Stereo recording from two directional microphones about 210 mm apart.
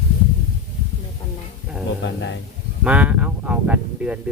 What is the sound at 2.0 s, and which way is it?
Speech, 60° left (ahead or behind).